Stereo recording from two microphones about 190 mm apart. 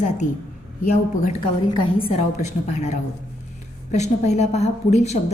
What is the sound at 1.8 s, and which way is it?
A woman's voice, 30° left (ahead or behind).